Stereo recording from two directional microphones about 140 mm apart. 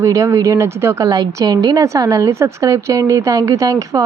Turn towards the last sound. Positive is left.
turn(degrees=-25)  # may be behind; listen again after turning